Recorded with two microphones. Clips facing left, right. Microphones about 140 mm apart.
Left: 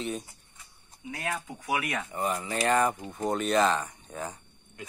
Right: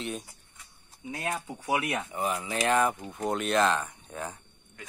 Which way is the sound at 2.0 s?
Centre (ahead or behind).